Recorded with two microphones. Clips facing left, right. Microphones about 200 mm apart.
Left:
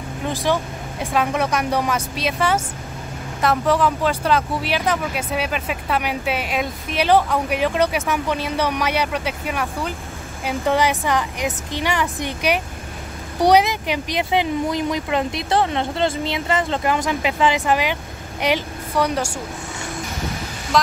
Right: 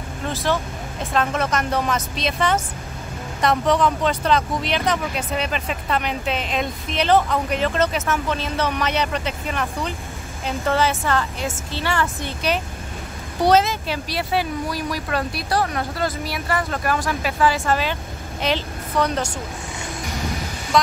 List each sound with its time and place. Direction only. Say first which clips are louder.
0.2 s speech: left 2 dB; 15° left (ahead or behind)
20.7 s speech: even; centre (ahead or behind)